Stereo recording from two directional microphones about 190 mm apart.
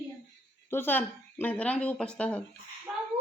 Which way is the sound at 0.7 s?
10° left (ahead or behind).